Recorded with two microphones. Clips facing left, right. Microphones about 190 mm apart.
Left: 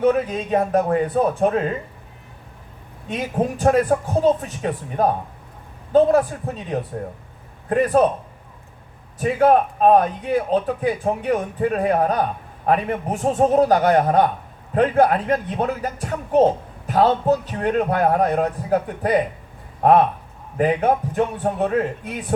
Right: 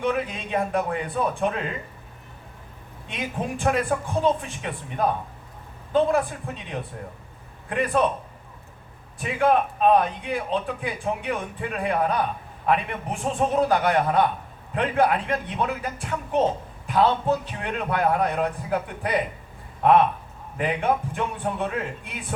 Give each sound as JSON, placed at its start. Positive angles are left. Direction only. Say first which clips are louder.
{"t": 0.0, "sound": "a man's voice", "louder": "left 7 dB", "side_deg": 40}
{"t": 3.1, "sound": "a man's voice", "louder": "left 7 dB", "side_deg": 40}
{"t": 9.1, "sound": "a man's voice", "louder": "left 5 dB", "side_deg": 40}